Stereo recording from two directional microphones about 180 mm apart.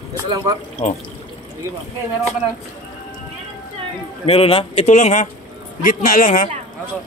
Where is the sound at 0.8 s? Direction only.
40° left (ahead or behind).